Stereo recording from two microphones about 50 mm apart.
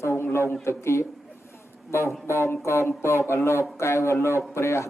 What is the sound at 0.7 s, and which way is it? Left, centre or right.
A man's voice, left.